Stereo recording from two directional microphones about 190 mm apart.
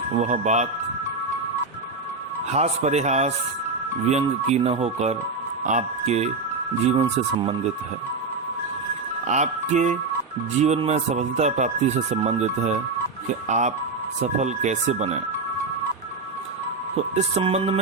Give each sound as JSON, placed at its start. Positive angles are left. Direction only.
{"t": 0.2, "sound": "speech", "side_deg": -40}
{"t": 2.5, "sound": "speech", "side_deg": -35}
{"t": 9.2, "sound": "speech", "side_deg": -40}
{"t": 17.2, "sound": "speech", "side_deg": -35}